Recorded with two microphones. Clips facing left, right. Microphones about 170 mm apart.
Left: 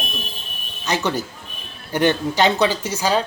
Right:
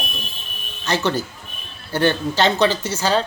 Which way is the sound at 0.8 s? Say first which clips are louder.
Right 1 dB; 15° left (ahead or behind).